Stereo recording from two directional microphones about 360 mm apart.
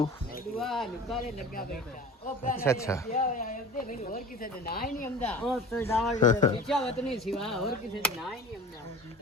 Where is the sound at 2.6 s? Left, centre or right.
Centre.